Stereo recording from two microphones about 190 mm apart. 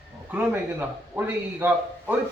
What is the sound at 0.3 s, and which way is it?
Speech, 10° right (ahead or behind).